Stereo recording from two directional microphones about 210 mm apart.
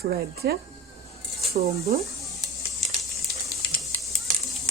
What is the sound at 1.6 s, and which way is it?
Speech, 40° right (ahead or behind).